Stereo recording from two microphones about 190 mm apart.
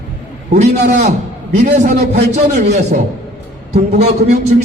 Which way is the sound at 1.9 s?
55° right (ahead or behind).